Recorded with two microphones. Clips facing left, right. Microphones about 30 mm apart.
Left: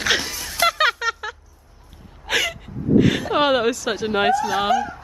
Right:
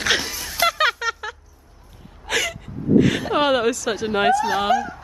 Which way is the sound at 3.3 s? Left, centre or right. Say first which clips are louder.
Even; centre.